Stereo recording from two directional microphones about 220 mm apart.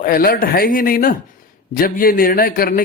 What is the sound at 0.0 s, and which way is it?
Speech, 40° left (ahead or behind).